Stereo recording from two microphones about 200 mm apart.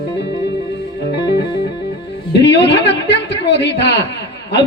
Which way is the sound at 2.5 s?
60° left (ahead or behind).